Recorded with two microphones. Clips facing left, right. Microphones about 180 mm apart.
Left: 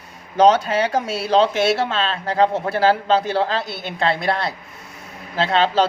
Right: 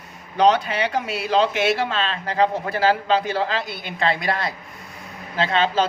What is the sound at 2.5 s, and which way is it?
Speech, 25° left (ahead or behind).